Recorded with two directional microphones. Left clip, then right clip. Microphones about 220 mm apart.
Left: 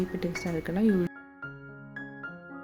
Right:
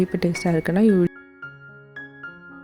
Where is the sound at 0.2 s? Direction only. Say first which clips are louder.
Right 9 dB; 35° right (ahead or behind).